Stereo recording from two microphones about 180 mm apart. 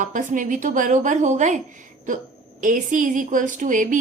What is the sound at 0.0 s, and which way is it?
A woman's voice, 45° right (ahead or behind).